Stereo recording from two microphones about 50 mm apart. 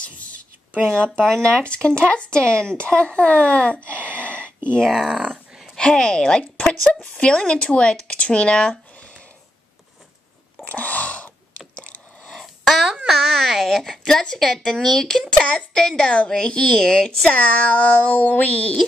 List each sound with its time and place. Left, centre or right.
0.0 s a sound: left
0.7 s speech: right
1.2 s speech: centre
5.0 s speech: centre
5.8 s a woman's voice: centre
10.6 s chewing: left
12.3 s a sound: centre
12.9 s a sound: centre
13.7 s a woman's voice: centre
17.3 s speech: left